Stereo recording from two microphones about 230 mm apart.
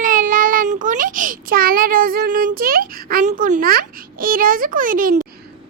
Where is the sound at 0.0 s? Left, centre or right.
Right.